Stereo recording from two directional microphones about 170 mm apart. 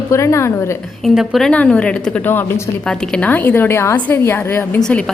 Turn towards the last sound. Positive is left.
turn(degrees=5)  # may be behind; listen again after turning